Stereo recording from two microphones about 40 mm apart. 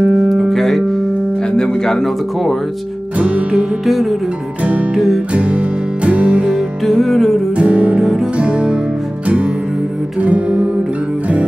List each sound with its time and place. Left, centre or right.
0.3 s music: centre
1.9 s speech: centre
3.2 s music: right
3.8 s speech: centre
4.9 s music: centre
5.3 s music: right
6.9 s speech: centre
7.5 s music: right
8.0 s music: centre
8.4 s music: right
10.2 s music: right